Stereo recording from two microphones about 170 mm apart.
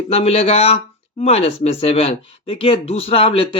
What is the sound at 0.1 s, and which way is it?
Speech, 35° left (ahead or behind).